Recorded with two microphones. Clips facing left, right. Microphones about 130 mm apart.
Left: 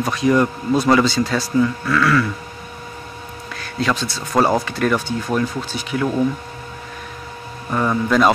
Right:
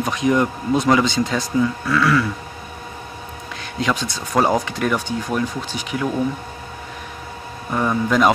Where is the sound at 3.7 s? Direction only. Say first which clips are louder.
Left 1 dB; 15° right (ahead or behind).